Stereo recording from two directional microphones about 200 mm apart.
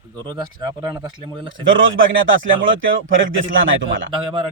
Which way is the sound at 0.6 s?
20° right (ahead or behind).